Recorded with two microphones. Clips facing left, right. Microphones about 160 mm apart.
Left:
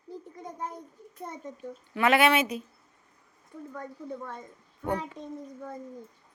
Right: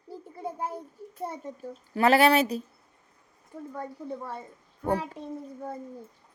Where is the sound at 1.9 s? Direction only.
35° right (ahead or behind).